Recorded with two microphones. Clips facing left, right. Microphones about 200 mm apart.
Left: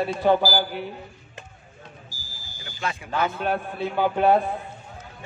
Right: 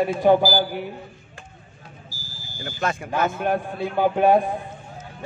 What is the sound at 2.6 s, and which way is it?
Speech, 45° right (ahead or behind).